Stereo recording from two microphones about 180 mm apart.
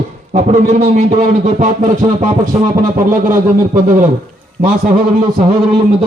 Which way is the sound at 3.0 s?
50° right (ahead or behind).